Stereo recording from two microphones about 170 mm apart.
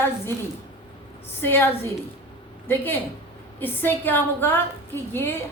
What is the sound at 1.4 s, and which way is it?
Speech, 15° left (ahead or behind).